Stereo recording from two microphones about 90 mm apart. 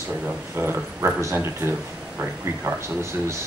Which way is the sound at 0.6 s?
25° right (ahead or behind).